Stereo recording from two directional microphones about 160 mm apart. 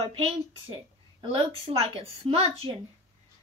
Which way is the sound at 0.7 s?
30° right (ahead or behind).